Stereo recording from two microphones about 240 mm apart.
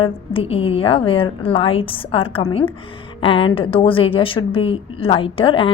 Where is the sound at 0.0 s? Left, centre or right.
Left.